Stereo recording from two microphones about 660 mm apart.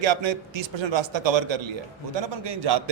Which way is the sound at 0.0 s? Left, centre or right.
Right.